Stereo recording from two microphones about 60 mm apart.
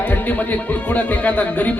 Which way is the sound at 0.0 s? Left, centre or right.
Left.